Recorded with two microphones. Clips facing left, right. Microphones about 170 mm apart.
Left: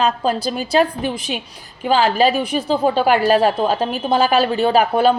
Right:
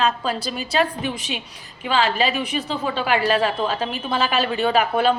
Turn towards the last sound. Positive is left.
turn(degrees=40)  # may be behind; listen again after turning